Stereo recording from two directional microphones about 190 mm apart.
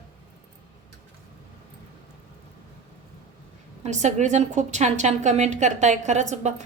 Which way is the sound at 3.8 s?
40° right (ahead or behind).